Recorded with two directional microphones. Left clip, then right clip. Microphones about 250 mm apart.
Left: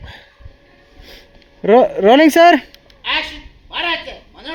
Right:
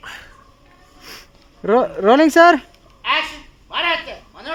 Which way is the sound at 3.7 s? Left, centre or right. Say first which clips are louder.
Right 1 dB; centre.